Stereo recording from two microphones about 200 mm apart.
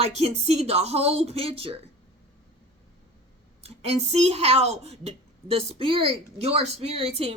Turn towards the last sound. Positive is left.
turn(degrees=-30)  # may be behind; listen again after turning